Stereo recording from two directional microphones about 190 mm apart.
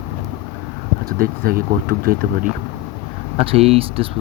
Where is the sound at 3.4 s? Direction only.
30° right (ahead or behind).